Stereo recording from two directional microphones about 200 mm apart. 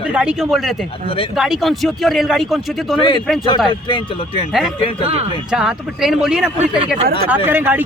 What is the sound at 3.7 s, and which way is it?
Speech, 25° left (ahead or behind).